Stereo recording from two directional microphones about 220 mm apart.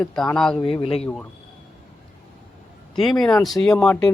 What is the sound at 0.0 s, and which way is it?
Speech, 5° left (ahead or behind).